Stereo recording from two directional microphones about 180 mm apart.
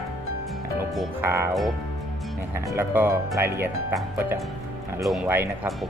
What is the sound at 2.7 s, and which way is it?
Speech, 10° right (ahead or behind).